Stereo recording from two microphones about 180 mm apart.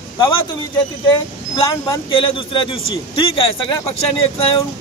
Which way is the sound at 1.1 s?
25° left (ahead or behind).